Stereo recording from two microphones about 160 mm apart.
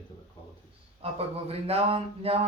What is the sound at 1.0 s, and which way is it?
Speech, 40° right (ahead or behind).